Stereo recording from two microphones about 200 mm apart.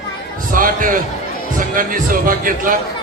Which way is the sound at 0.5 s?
45° right (ahead or behind).